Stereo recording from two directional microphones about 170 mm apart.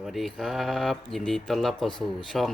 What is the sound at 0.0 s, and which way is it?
Speech, centre (ahead or behind).